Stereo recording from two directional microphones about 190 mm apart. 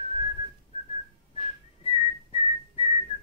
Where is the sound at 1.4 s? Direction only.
30° left (ahead or behind).